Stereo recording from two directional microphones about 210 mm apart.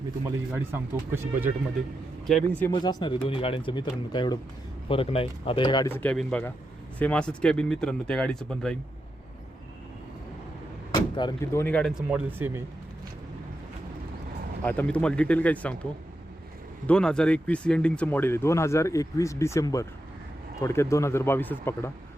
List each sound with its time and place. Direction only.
0.5 s speech: 10° right (ahead or behind)
2.2 s speech: 5° left (ahead or behind)
2.7 s speech: 20° left (ahead or behind)
5.9 s speech: 5° left (ahead or behind)
11.2 s speech: 15° left (ahead or behind); by 12.6 s 10° right (ahead or behind)
14.6 s speech: 5° left (ahead or behind)
16.8 s speech: 5° left (ahead or behind)